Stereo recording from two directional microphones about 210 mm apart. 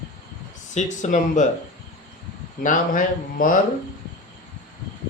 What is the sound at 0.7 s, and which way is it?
Speech, 35° left (ahead or behind).